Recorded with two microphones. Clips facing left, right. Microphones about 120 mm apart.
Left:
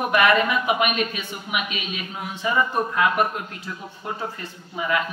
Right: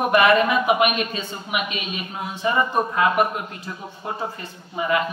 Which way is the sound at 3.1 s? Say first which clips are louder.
Right 2 dB; 5° right (ahead or behind).